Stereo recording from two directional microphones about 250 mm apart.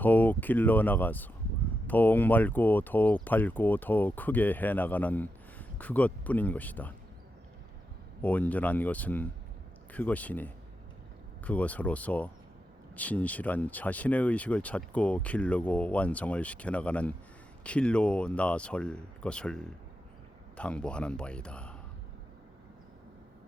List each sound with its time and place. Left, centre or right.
0.0 s speech: centre
8.2 s speech: centre